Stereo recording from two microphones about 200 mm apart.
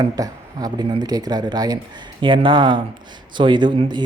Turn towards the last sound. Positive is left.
turn(degrees=-20)  # may be behind; listen again after turning